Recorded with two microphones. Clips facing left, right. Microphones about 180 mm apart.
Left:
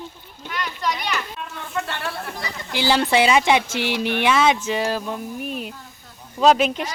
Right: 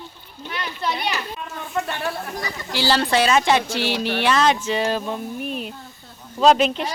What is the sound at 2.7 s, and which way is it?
Speech, 15° left (ahead or behind).